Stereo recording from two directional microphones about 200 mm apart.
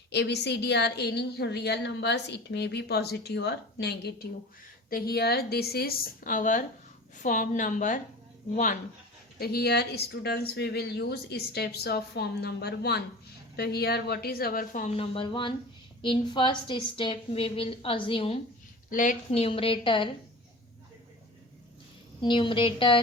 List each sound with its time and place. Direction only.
0.1 s a woman's voice: 55° left (ahead or behind); by 8.8 s 40° left (ahead or behind)
9.4 s a woman's voice: 55° left (ahead or behind); by 18.3 s 25° left (ahead or behind)
18.9 s a woman's voice: 40° left (ahead or behind); by 20.1 s 25° left (ahead or behind)
22.2 s a woman's voice: 25° left (ahead or behind)